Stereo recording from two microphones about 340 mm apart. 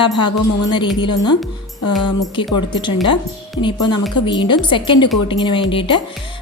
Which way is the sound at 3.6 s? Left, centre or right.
Centre.